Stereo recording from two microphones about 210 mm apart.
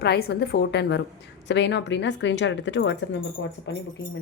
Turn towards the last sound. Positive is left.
turn(degrees=65)  # may be behind; listen again after turning